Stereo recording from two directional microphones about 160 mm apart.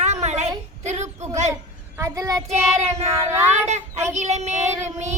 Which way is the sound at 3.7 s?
45° right (ahead or behind).